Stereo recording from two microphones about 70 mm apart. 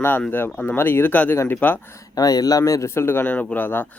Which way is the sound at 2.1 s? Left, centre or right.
Left.